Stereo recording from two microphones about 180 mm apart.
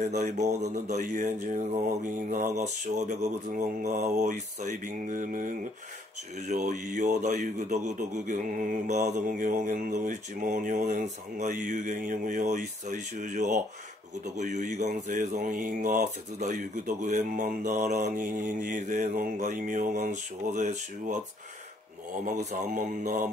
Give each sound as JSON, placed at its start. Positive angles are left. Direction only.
{"t": 0.6, "sound": "speech", "side_deg": -40}
{"t": 22.2, "sound": "speech", "side_deg": -40}